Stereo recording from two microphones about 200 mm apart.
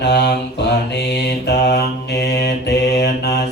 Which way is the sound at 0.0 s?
55° left (ahead or behind).